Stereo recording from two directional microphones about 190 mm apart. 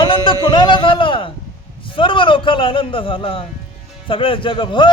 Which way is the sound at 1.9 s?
25° left (ahead or behind).